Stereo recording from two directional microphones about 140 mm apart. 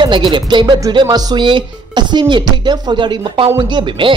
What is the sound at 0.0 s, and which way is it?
A man's voice, 35° right (ahead or behind).